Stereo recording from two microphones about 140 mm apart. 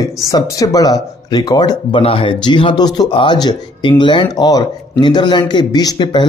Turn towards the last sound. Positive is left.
turn(degrees=35)  # may be behind; listen again after turning